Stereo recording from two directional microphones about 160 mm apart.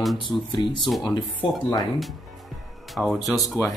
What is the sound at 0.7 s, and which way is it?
Speech, centre (ahead or behind).